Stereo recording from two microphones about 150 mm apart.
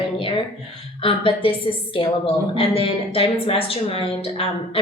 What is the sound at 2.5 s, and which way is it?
A woman's voice, 40° left (ahead or behind).